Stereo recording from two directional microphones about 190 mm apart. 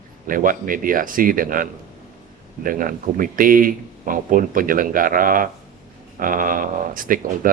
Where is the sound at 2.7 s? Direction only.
45° right (ahead or behind).